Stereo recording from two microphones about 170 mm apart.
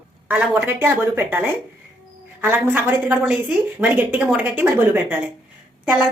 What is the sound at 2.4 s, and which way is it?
A woman's voice, 10° right (ahead or behind).